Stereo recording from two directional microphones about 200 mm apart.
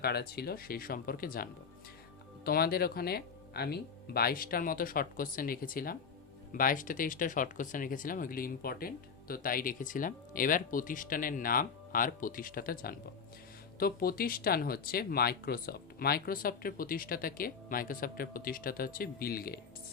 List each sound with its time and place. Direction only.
0.0 s speech: 55° left (ahead or behind)